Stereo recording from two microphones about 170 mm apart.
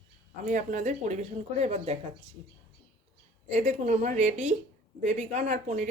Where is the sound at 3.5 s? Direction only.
45° right (ahead or behind).